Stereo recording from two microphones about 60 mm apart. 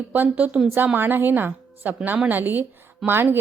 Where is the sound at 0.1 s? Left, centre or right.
Right.